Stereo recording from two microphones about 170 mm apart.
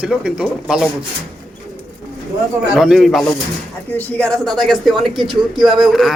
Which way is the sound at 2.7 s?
Centre (ahead or behind).